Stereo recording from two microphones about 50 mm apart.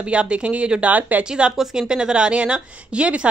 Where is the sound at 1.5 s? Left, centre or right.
Centre.